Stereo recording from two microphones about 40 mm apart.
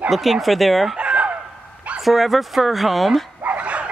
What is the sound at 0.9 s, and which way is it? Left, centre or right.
Chicken, right.